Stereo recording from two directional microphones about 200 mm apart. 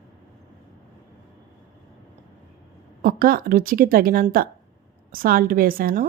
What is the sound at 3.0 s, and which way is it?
A woman's voice, 45° right (ahead or behind).